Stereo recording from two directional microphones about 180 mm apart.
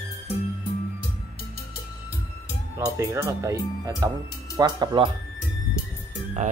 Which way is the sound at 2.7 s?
15° right (ahead or behind).